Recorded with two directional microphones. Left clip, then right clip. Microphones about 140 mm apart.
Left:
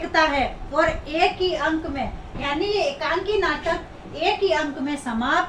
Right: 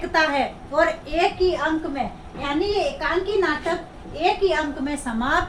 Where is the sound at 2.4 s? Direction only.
20° right (ahead or behind).